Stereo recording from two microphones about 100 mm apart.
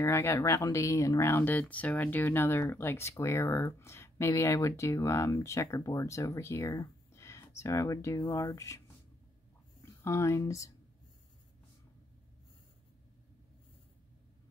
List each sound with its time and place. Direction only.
0.0 s speech: 25° left (ahead or behind)
10.0 s speech: 30° left (ahead or behind)